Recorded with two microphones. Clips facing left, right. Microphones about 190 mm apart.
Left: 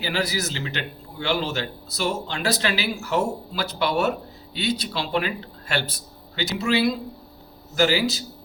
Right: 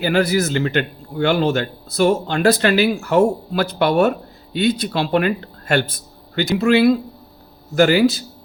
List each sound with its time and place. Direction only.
0.0 s a man's voice: 55° right (ahead or behind)